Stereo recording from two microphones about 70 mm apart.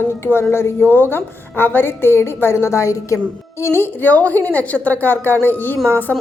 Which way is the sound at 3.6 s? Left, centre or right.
Left.